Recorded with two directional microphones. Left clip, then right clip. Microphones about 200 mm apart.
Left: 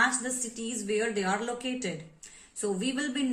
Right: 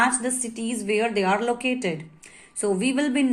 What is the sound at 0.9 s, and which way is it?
A woman's voice, 30° right (ahead or behind).